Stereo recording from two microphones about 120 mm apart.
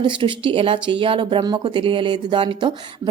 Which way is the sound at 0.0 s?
45° right (ahead or behind).